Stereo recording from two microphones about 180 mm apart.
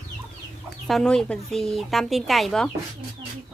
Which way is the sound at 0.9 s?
Centre (ahead or behind).